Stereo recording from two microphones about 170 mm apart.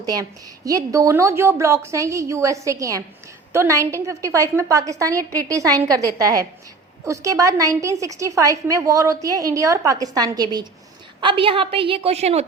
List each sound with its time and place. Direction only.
0.0 s a woman's voice: 20° right (ahead or behind); by 12.5 s 40° right (ahead or behind)